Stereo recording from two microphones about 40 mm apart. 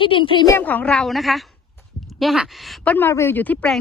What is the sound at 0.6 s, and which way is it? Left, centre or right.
Speech, left.